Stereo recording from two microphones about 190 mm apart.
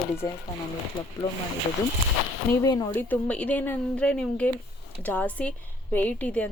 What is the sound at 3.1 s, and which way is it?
Speech, 5° left (ahead or behind).